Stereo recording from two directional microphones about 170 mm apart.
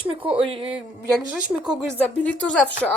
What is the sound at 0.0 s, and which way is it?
Speech, 30° right (ahead or behind).